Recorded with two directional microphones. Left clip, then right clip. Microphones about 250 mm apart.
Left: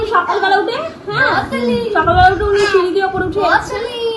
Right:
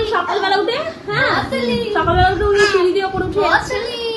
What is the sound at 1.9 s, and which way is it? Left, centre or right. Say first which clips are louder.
Speech: left 4 dB; left.